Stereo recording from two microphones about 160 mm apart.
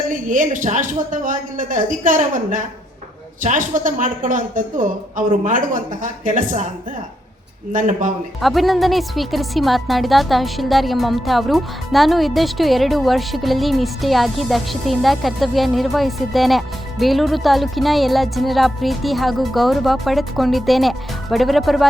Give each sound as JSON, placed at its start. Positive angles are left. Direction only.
{"t": 0.1, "sound": "a woman's voice", "side_deg": -55}
{"t": 7.7, "sound": "a woman's voice", "side_deg": -55}
{"t": 8.4, "sound": "a woman's voice", "side_deg": 0}